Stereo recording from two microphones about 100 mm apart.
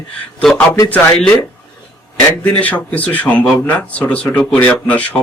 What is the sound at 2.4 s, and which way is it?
Speech, 15° left (ahead or behind).